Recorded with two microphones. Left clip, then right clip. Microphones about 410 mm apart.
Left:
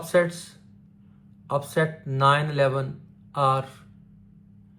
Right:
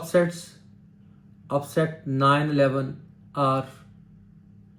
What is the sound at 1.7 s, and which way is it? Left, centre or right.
Speech, left.